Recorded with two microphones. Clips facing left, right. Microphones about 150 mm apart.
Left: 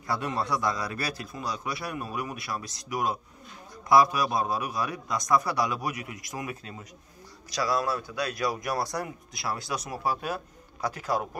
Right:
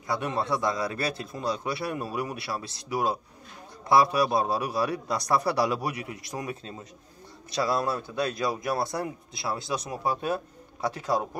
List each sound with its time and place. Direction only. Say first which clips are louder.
0.0 s a man's voice: right 1 dB; 20° right (ahead or behind)